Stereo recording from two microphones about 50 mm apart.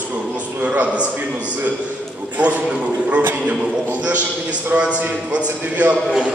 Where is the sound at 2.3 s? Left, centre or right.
Right.